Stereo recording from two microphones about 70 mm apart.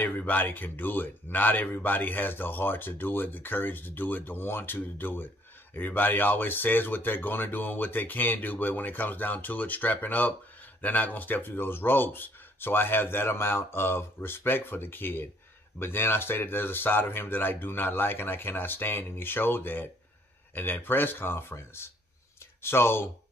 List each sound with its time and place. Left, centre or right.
0.0 s speech: left